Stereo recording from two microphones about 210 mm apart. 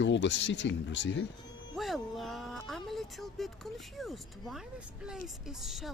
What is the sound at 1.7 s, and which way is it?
Speech, centre (ahead or behind).